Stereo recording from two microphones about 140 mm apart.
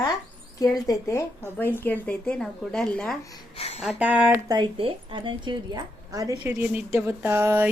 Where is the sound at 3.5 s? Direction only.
45° left (ahead or behind).